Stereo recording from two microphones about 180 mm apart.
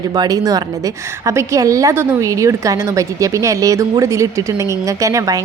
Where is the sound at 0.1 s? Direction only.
20° right (ahead or behind).